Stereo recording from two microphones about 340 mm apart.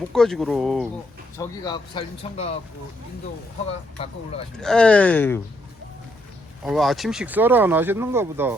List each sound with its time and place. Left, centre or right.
0.1 s speech: centre
1.4 s speech: centre
4.0 s speech: centre
4.5 s speech: centre
6.7 s speech: centre